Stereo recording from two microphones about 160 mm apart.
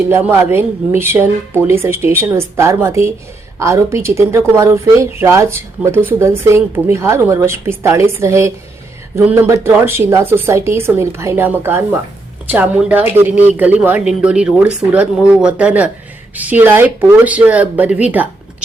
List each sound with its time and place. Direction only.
0.1 s speech: 15° right (ahead or behind)